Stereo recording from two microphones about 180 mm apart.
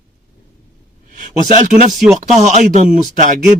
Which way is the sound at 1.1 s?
45° right (ahead or behind).